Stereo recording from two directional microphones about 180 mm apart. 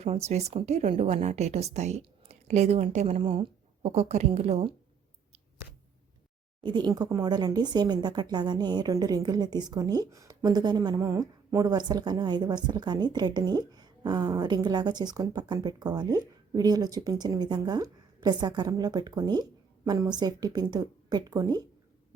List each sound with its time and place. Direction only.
0.0 s a woman's voice: 35° right (ahead or behind)
6.6 s speech: 25° right (ahead or behind)